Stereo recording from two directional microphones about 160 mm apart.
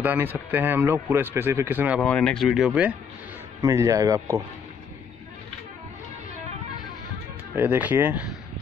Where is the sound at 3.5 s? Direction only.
20° right (ahead or behind).